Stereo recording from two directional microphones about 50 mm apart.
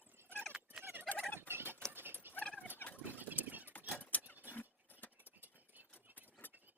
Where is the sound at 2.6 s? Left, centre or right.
Left.